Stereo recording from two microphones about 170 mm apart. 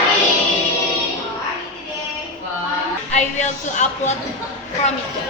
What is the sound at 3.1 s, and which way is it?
Speech, 45° left (ahead or behind).